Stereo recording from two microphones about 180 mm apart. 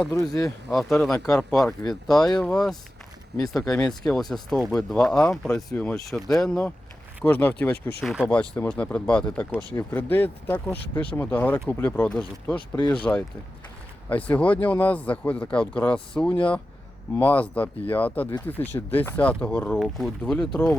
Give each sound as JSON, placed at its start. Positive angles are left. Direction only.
{"t": 0.0, "sound": "speech", "side_deg": 5}
{"t": 0.3, "sound": "speech", "side_deg": 20}
{"t": 0.7, "sound": "speech", "side_deg": 0}
{"t": 8.0, "sound": "speech", "side_deg": -5}
{"t": 8.3, "sound": "speech", "side_deg": 10}